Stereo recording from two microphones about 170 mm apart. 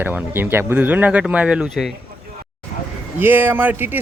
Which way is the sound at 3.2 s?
10° right (ahead or behind).